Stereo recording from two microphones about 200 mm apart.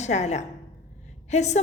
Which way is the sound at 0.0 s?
35° left (ahead or behind).